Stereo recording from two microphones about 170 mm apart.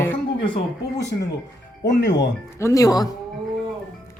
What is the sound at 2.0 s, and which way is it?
Speech, 90° left.